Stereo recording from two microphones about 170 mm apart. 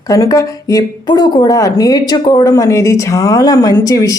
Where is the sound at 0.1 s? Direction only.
20° left (ahead or behind).